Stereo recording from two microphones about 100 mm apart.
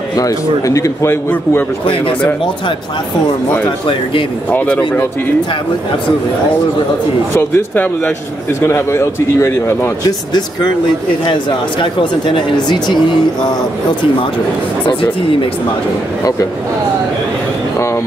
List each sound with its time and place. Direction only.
0.1 s a man's voice: 35° left (ahead or behind)
3.6 s speech: 55° left (ahead or behind)
4.5 s a man's voice: 15° left (ahead or behind)
7.3 s a man's voice: 20° left (ahead or behind)
10.0 s speech: 45° left (ahead or behind)
11.8 s speech: 55° left (ahead or behind)